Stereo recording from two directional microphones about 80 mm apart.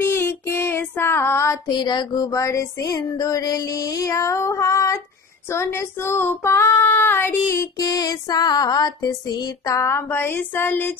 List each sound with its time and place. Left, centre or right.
0.0 s child singing: left
1.7 s music: left
2.3 s music: left
5.5 s child singing: left
7.7 s music: left
9.7 s child singing: left